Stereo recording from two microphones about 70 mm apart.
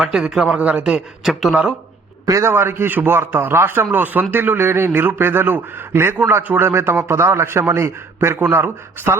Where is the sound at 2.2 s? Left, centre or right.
Right.